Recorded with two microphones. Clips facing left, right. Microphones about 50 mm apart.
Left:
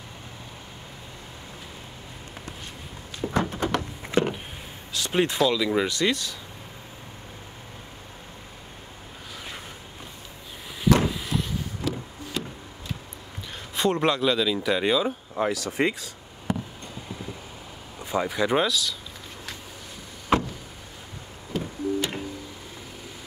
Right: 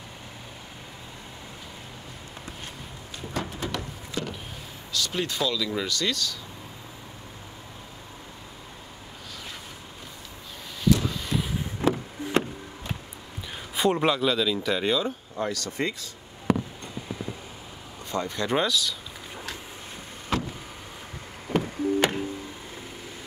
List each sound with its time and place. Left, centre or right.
3.2 s a sound: left
4.9 s speech: left
11.8 s vehicle: right
13.7 s speech: centre
16.5 s a sound: right
18.1 s speech: centre
20.3 s vehicle: left
21.5 s busy signal: right